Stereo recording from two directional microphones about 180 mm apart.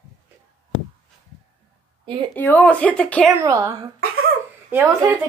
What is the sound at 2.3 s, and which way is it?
Speech, 10° left (ahead or behind).